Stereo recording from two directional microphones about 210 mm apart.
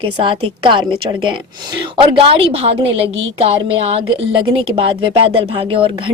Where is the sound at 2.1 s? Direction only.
25° right (ahead or behind).